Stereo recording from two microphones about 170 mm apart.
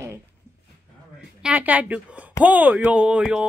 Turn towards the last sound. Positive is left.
turn(degrees=-5)  # may be behind; listen again after turning